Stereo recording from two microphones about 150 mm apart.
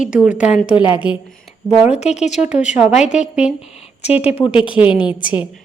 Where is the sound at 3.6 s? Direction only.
45° left (ahead or behind).